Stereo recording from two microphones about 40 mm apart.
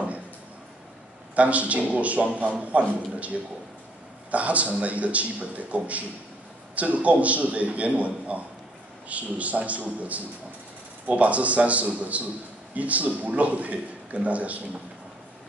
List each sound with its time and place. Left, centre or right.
1.3 s a man's voice: right